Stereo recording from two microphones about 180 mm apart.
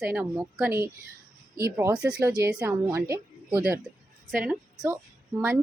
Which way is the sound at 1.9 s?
5° right (ahead or behind).